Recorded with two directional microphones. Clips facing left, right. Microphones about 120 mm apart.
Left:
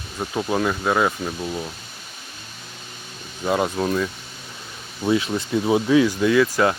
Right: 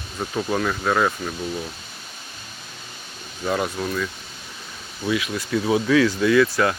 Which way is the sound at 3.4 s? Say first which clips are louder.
Left 2 dB; 20° left (ahead or behind).